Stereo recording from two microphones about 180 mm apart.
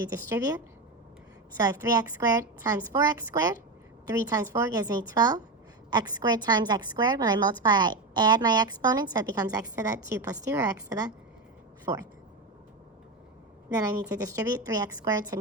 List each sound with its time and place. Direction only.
0.1 s a woman's voice: 15° right (ahead or behind)
13.7 s a woman's voice: 20° right (ahead or behind)